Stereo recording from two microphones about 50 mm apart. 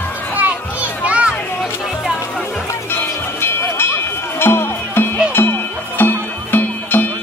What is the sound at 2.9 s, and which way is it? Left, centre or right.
Music, left.